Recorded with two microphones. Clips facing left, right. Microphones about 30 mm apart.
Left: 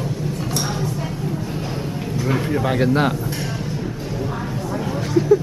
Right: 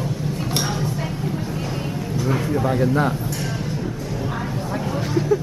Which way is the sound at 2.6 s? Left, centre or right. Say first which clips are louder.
Left 2 dB; left.